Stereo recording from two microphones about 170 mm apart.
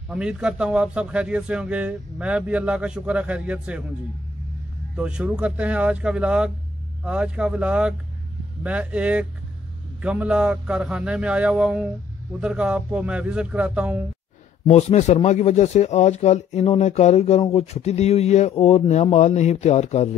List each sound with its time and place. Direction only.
0.1 s a man's voice: 5° right (ahead or behind)
4.9 s a man's voice: 5° right (ahead or behind)
14.7 s speech: 40° left (ahead or behind)